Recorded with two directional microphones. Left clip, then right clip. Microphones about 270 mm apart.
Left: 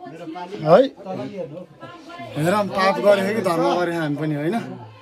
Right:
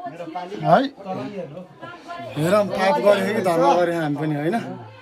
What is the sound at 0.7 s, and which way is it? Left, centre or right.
Speech, centre.